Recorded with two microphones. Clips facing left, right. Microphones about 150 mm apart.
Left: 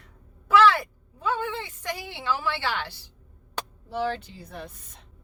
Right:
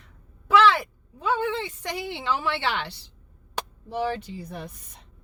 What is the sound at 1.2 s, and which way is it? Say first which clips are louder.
A woman's voice: right 3 dB; 20° right (ahead or behind).